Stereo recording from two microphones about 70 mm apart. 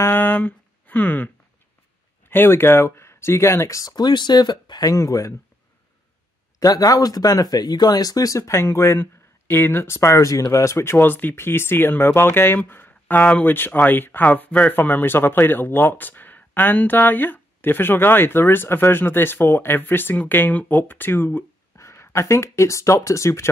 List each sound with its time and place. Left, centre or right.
0.0 s speech: left
3.9 s speech: left
4.9 s speech: left
6.6 s speech: left
21.7 s speech: left